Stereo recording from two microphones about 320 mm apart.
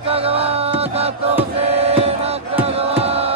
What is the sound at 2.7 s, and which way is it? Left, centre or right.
Chant, centre.